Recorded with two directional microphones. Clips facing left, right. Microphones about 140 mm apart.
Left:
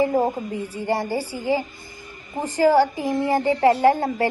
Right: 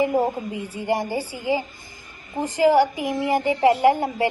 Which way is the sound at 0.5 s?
15° right (ahead or behind).